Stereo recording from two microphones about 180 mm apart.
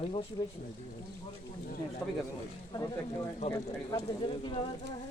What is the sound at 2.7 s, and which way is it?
Speech, 25° left (ahead or behind).